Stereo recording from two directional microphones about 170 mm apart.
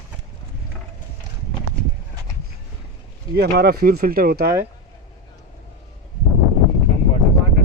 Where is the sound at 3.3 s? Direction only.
65° right (ahead or behind).